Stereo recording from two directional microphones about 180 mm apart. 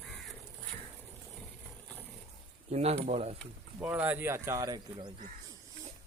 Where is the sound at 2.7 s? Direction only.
35° right (ahead or behind).